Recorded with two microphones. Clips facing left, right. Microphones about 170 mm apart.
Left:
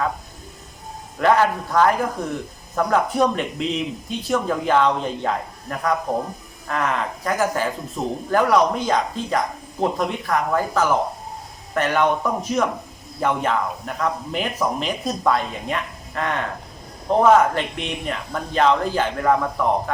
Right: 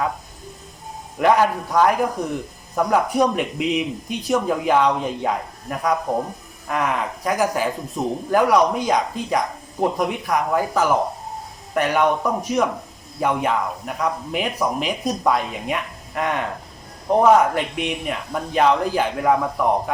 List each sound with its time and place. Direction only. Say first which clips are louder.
1.2 s speech: right 1 dB; 15° right (ahead or behind)